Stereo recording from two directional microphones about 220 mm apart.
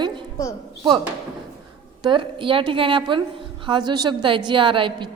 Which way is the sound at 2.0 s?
20° right (ahead or behind).